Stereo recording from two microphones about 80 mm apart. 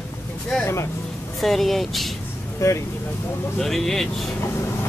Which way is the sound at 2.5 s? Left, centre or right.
Left.